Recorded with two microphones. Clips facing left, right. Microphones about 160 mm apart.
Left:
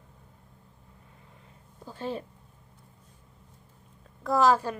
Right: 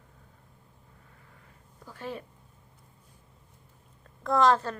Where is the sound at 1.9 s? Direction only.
30° left (ahead or behind).